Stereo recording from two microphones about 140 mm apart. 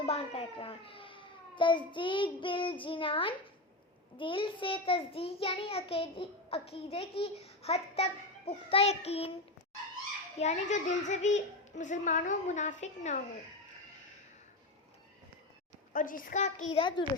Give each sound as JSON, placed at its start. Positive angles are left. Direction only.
{"t": 0.0, "sound": "a child's voice", "side_deg": 45}
{"t": 10.3, "sound": "a child's voice", "side_deg": 55}
{"t": 15.9, "sound": "a child's voice", "side_deg": 75}
{"t": 16.8, "sound": "a child's voice", "side_deg": 35}